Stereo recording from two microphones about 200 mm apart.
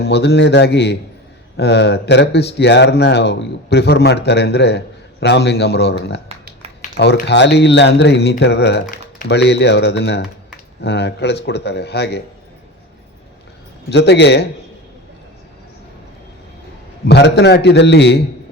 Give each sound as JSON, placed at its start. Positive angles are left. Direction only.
{"t": 0.0, "sound": "speech", "side_deg": 55}
{"t": 13.9, "sound": "speech", "side_deg": 55}
{"t": 17.1, "sound": "speech", "side_deg": 60}